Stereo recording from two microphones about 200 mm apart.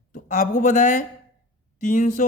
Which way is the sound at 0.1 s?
40° left (ahead or behind).